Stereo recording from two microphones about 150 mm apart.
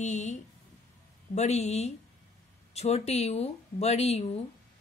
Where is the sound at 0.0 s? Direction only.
50° left (ahead or behind).